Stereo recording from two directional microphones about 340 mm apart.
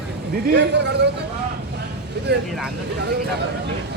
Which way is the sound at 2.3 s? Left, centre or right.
Right.